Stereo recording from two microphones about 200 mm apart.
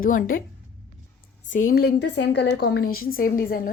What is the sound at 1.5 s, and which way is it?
A woman's voice, 45° left (ahead or behind).